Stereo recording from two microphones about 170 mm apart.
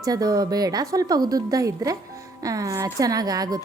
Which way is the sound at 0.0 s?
20° right (ahead or behind).